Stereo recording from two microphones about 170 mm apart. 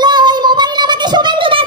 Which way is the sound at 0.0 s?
25° right (ahead or behind).